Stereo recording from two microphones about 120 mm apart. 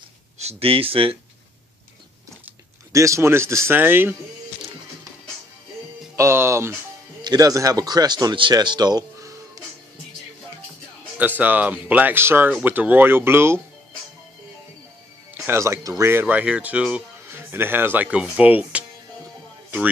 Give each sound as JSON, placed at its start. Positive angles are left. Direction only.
{"t": 0.4, "sound": "speech", "side_deg": -60}
{"t": 2.9, "sound": "a man's voice", "side_deg": -25}
{"t": 6.1, "sound": "a man's voice", "side_deg": -25}
{"t": 7.2, "sound": "speech", "side_deg": -35}
{"t": 11.1, "sound": "speech", "side_deg": -15}
{"t": 15.3, "sound": "speech", "side_deg": -20}